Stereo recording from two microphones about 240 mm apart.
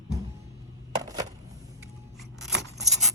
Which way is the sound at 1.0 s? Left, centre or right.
Centre.